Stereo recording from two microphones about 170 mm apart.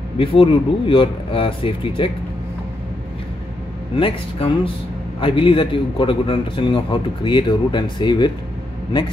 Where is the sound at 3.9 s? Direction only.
30° left (ahead or behind).